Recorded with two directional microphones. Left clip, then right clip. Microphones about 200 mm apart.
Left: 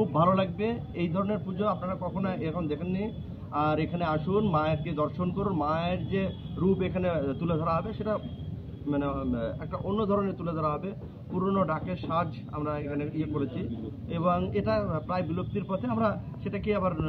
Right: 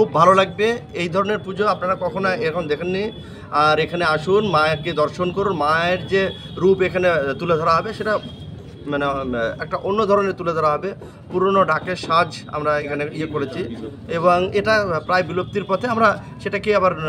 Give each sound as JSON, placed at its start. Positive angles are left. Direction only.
{"t": 0.0, "sound": "a man's voice", "side_deg": -40}